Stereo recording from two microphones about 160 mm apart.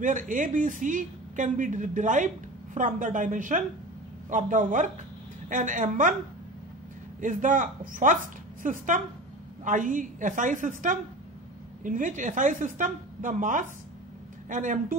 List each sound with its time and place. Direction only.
0.0 s a woman's voice: 55° right (ahead or behind)
7.2 s a woman's voice: 55° right (ahead or behind)